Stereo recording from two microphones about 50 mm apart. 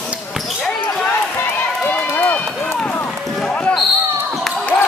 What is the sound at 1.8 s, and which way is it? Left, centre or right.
Run, left.